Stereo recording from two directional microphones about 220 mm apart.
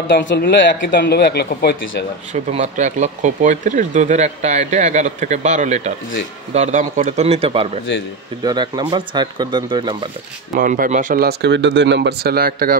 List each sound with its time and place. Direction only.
0.1 s a man's voice: 45° left (ahead or behind)
2.3 s speech: 30° right (ahead or behind)
10.5 s speech: 40° right (ahead or behind)